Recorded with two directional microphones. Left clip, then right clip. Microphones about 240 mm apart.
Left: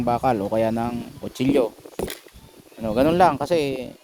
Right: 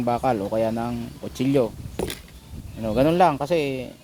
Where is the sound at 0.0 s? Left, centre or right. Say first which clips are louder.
Left 1 dB; centre.